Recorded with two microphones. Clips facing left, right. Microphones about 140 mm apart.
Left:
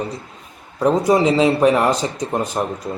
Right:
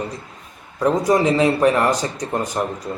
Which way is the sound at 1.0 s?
20° left (ahead or behind).